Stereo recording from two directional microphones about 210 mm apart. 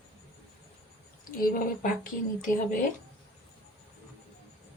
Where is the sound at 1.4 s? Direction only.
45° left (ahead or behind).